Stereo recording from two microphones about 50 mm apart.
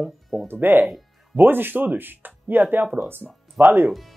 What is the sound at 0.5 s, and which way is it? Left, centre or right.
Speech, right.